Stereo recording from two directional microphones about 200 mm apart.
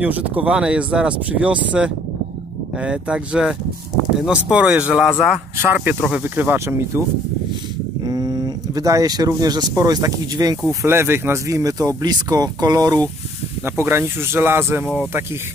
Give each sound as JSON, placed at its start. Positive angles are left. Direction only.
{"t": 0.0, "sound": "speech", "side_deg": -5}
{"t": 8.0, "sound": "speech", "side_deg": -20}